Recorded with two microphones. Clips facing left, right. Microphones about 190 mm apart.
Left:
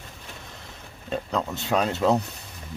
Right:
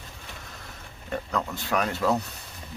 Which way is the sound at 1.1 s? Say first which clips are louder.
Left 2 dB; 25° left (ahead or behind).